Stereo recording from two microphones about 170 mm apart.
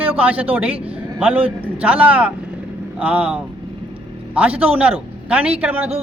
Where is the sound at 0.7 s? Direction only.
35° right (ahead or behind).